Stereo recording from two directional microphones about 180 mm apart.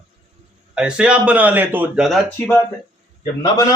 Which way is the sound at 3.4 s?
20° left (ahead or behind).